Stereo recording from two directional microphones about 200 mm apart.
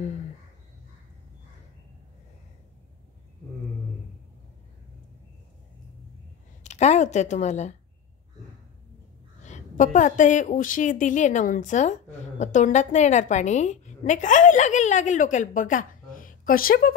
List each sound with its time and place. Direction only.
6.6 s a woman's voice: 35° left (ahead or behind)
9.4 s a woman's voice: 35° left (ahead or behind)